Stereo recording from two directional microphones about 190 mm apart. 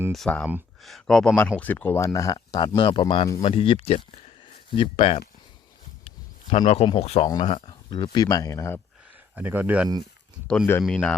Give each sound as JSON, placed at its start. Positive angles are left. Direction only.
{"t": 0.1, "sound": "speech", "side_deg": 5}
{"t": 9.3, "sound": "speech", "side_deg": -10}